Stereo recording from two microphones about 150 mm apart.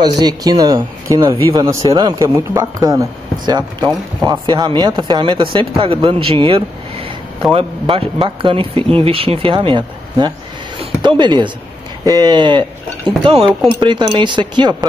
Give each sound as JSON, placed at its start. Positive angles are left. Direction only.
{"t": 0.0, "sound": "speech", "side_deg": -25}